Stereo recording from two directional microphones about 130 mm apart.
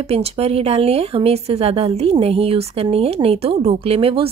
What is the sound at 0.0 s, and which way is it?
Speech, 50° right (ahead or behind).